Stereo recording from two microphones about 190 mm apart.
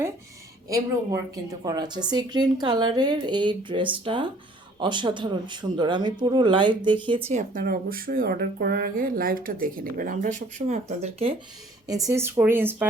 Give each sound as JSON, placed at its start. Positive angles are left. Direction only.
{"t": 1.6, "sound": "a woman's voice", "side_deg": -20}
{"t": 7.3, "sound": "speech", "side_deg": -35}
{"t": 7.6, "sound": "speech", "side_deg": -50}
{"t": 11.9, "sound": "speech", "side_deg": -20}